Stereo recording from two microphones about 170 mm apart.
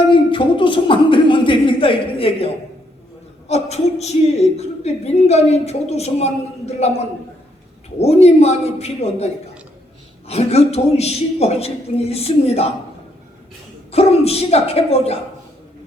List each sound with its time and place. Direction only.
0.1 s a sound: 30° left (ahead or behind)
3.5 s a woman's voice: 40° left (ahead or behind)
7.9 s a woman's voice: 40° left (ahead or behind)
13.9 s a woman's voice: 35° left (ahead or behind)